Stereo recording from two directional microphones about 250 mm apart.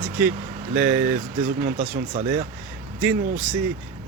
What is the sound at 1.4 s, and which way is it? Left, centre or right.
Speech, right.